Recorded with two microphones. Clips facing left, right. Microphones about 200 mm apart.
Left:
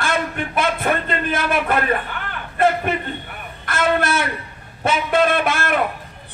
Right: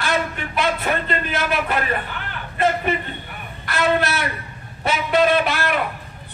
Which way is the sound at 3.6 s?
50° left (ahead or behind).